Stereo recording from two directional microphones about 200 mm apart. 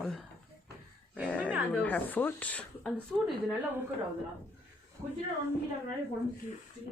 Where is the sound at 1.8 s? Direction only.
10° left (ahead or behind).